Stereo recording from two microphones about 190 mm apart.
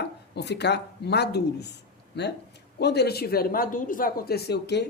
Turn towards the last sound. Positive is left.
turn(degrees=60)  # may be behind; listen again after turning